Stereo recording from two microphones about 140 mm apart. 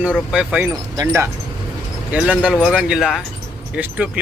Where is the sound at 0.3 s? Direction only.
10° right (ahead or behind).